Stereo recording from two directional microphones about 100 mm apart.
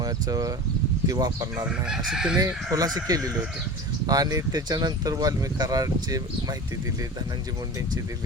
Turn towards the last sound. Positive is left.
turn(degrees=-40)  # may be behind; listen again after turning